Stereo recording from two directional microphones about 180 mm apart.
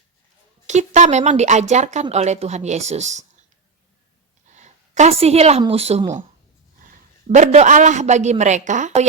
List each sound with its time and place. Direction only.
0.7 s speech: 40° right (ahead or behind)
4.5 s a woman's voice: 40° right (ahead or behind)